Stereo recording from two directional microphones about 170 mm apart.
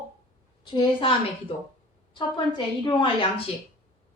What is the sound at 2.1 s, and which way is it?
A woman's voice, 25° left (ahead or behind).